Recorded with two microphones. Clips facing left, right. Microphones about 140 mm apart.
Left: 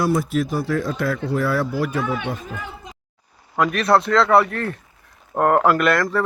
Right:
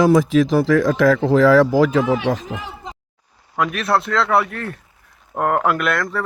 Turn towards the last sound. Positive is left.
turn(degrees=0)  # may be behind; listen again after turning